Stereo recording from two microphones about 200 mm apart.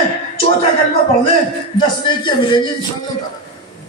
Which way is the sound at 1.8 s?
25° left (ahead or behind).